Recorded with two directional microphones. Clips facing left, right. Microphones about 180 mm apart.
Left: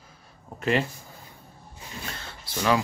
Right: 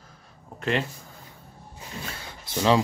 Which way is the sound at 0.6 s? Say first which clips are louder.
Left 2 dB; 5° left (ahead or behind).